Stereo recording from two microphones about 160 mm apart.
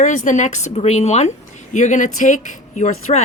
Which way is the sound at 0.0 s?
50° left (ahead or behind).